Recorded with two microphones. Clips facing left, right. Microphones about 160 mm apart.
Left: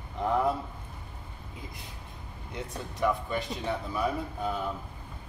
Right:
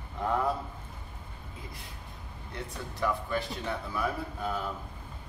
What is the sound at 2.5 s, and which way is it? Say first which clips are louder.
Speech: left 2 dB; 20° left (ahead or behind).